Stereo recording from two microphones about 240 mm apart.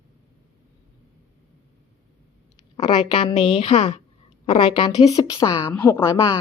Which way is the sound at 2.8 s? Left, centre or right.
Centre.